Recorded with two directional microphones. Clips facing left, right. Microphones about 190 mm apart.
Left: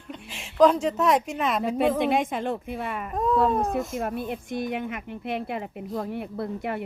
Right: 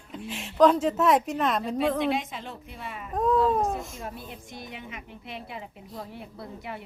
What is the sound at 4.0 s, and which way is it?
A woman's voice, 60° left (ahead or behind).